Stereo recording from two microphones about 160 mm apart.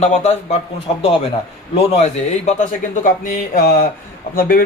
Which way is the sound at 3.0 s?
60° left (ahead or behind).